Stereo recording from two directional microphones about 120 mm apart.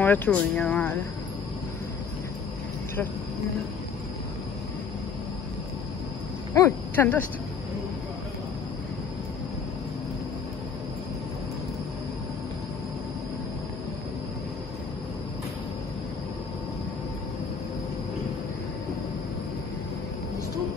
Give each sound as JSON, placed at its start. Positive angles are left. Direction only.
{"t": 0.0, "sound": "speech", "side_deg": 15}
{"t": 6.5, "sound": "speech", "side_deg": 20}